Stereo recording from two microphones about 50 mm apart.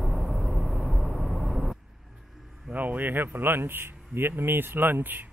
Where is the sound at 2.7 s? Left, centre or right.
Right.